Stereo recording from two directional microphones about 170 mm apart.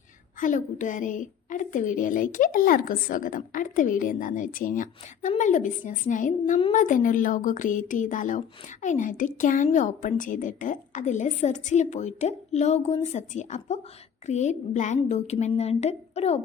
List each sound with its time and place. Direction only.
0.3 s a woman's voice: 50° left (ahead or behind)